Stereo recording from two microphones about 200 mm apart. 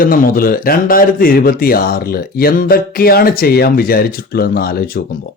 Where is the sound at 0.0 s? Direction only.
45° left (ahead or behind).